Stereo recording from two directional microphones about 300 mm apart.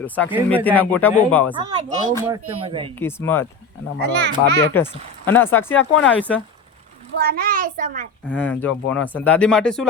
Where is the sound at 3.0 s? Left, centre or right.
Centre.